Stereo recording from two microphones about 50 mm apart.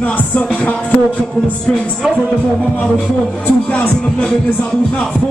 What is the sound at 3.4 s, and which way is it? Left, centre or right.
Music, left.